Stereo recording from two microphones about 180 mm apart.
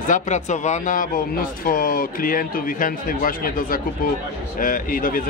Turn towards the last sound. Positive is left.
turn(degrees=50)  # may be behind; listen again after turning